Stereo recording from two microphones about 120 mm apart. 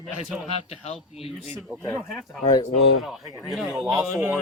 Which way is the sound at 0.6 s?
55° left (ahead or behind).